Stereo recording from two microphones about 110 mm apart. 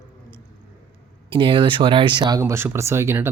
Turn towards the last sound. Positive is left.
turn(degrees=-20)  # may be behind; listen again after turning